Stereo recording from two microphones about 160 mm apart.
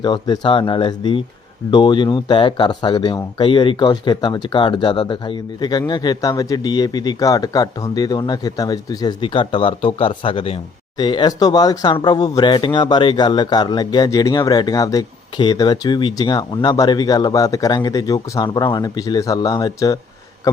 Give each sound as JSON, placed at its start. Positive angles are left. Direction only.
{"t": 0.0, "sound": "speech", "side_deg": 30}